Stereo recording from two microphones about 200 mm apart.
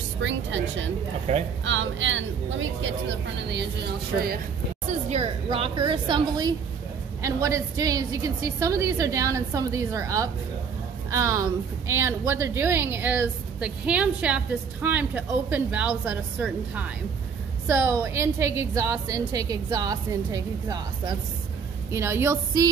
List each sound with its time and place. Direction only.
0.2 s a woman's voice: 70° right (ahead or behind)
1.3 s a woman's voice: 35° right (ahead or behind)
1.6 s a woman's voice: 70° right (ahead or behind)
3.4 s speech: 55° right (ahead or behind)
5.1 s a woman's voice: 30° right (ahead or behind)